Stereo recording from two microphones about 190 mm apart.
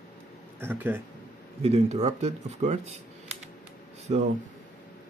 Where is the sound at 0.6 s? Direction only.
10° right (ahead or behind).